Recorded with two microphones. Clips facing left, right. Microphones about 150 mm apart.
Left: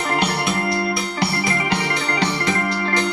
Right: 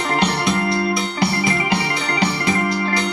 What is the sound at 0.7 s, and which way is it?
Music, 25° right (ahead or behind).